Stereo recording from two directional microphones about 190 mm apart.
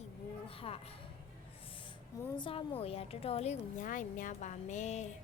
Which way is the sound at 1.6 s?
30° left (ahead or behind).